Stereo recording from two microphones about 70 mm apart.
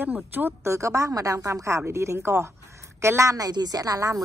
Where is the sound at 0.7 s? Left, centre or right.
Right.